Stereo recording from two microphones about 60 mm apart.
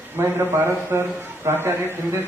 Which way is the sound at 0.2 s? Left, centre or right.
Right.